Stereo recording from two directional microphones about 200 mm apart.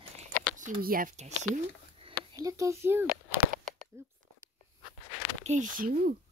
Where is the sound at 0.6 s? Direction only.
40° right (ahead or behind).